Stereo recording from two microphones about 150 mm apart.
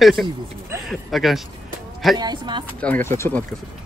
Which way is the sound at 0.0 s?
Centre (ahead or behind).